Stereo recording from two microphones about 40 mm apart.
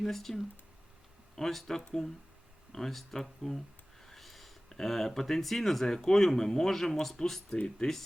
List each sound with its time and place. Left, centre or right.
0.0 s speech: centre